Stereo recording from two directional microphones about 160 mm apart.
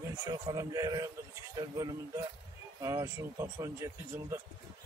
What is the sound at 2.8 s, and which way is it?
A man's voice, 20° right (ahead or behind).